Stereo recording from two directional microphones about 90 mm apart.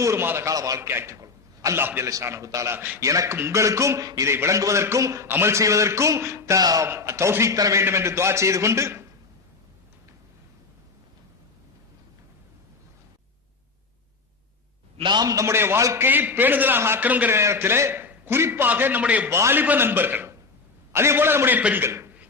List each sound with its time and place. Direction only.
0.0 s a man's voice: 30° right (ahead or behind)
0.5 s a man's voice: 40° right (ahead or behind)
0.8 s a man's voice: 25° right (ahead or behind)
1.8 s a man's voice: 25° right (ahead or behind)
2.0 s a man's voice: 35° right (ahead or behind)
2.7 s a man's voice: 20° right (ahead or behind)
3.0 s a man's voice: 35° right (ahead or behind)
6.8 s a man's voice: 30° right (ahead or behind)
14.9 s a man's voice: 60° right (ahead or behind); by 17.3 s 20° right (ahead or behind)
17.3 s a man's voice: 30° right (ahead or behind)
19.3 s a man's voice: 30° right (ahead or behind)
21.8 s speech: 30° right (ahead or behind)